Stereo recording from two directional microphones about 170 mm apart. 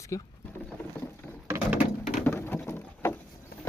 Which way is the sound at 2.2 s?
10° left (ahead or behind).